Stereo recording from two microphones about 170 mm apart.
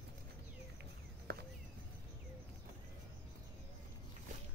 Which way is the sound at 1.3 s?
70° right (ahead or behind).